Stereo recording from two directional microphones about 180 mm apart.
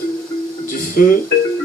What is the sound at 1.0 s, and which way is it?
Speech, 50° left (ahead or behind).